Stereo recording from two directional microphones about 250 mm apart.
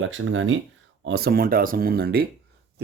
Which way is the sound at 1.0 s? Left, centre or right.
Right.